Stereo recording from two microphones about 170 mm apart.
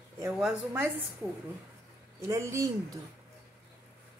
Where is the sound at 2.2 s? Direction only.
15° right (ahead or behind).